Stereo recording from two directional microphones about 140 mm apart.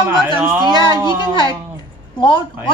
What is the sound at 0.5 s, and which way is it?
Speech, 30° right (ahead or behind).